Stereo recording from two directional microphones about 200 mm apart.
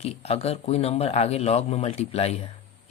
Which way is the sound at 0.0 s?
30° left (ahead or behind).